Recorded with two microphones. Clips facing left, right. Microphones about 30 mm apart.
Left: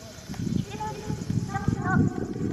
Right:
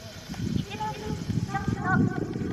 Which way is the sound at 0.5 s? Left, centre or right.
Right.